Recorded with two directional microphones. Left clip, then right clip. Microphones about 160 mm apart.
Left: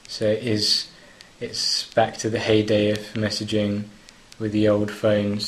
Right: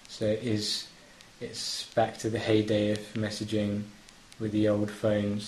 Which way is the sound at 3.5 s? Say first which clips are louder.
Left 7 dB; 15° left (ahead or behind).